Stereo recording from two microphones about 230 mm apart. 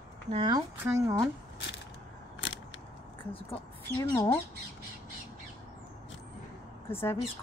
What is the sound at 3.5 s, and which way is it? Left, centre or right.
Speech, centre.